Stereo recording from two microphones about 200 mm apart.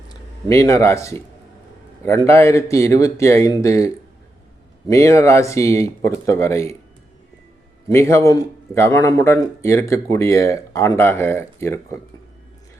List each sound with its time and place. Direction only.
0.1 s a man's voice: 15° left (ahead or behind)
7.9 s a man's voice: 15° left (ahead or behind)